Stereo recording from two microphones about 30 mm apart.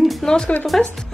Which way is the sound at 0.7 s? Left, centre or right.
Centre.